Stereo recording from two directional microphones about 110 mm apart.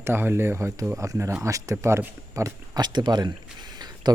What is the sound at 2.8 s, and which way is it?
Speech, 40° right (ahead or behind).